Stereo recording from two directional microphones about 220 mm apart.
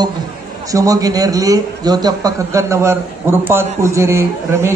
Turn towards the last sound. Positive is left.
turn(degrees=-10)  # may be behind; listen again after turning